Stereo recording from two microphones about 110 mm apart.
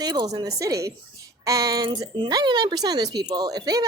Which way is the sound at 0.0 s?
40° right (ahead or behind).